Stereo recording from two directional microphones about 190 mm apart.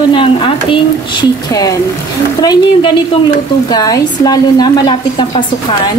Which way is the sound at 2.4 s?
20° left (ahead or behind).